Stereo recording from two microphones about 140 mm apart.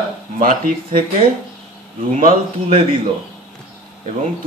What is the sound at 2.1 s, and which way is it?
Speech, 75° right (ahead or behind).